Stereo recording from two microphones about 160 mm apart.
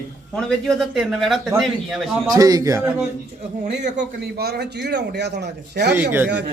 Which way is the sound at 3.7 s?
90° right.